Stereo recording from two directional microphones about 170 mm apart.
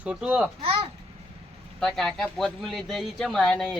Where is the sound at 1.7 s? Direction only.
Centre (ahead or behind).